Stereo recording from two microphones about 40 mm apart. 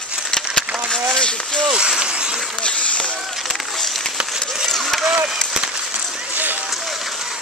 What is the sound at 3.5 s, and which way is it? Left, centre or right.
Run, centre.